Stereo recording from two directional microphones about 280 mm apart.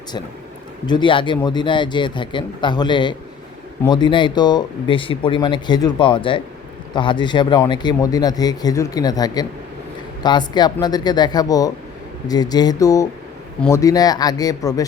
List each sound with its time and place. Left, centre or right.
0.9 s speech: centre